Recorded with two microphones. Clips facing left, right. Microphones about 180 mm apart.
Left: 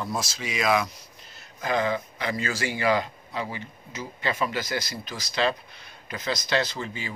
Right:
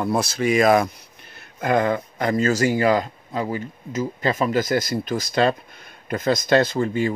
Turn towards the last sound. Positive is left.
turn(degrees=-50)  # may be behind; listen again after turning